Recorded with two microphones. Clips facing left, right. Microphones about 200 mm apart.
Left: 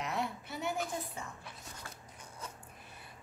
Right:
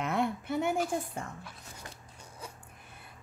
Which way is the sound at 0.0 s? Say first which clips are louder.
Right 6 dB; 55° right (ahead or behind).